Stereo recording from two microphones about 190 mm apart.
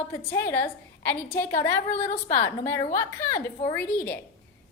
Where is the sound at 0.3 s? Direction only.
10° left (ahead or behind).